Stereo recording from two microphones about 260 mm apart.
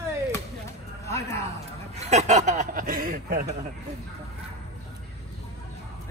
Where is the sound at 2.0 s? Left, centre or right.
Right.